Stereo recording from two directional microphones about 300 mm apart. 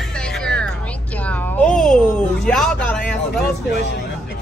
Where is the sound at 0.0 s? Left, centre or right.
Centre.